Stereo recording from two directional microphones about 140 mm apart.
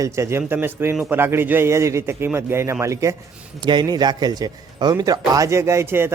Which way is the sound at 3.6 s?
30° right (ahead or behind).